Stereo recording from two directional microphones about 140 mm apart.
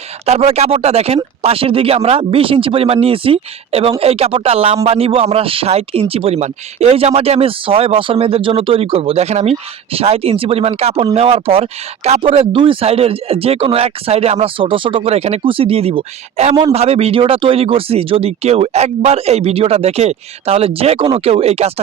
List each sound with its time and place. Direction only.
0.3 s speech: 50° right (ahead or behind)